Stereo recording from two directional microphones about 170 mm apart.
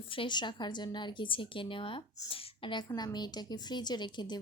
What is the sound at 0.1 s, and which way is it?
A woman's voice, 30° left (ahead or behind).